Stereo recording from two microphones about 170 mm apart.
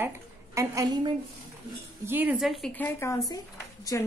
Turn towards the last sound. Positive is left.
turn(degrees=20)  # may be behind; listen again after turning